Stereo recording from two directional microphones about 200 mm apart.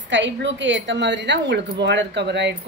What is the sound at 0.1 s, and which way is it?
Speech, 65° right (ahead or behind).